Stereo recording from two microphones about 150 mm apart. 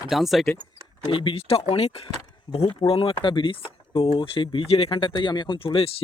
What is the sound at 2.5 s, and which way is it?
Speech, 30° left (ahead or behind).